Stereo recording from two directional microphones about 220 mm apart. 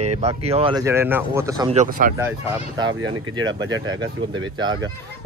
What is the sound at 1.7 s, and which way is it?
Speech, 35° right (ahead or behind).